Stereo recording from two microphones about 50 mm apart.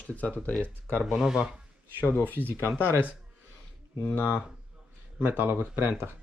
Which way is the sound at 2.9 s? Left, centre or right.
Right.